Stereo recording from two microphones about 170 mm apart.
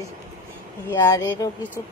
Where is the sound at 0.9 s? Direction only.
15° left (ahead or behind).